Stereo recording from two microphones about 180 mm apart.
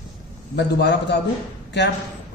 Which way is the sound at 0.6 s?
75° left (ahead or behind).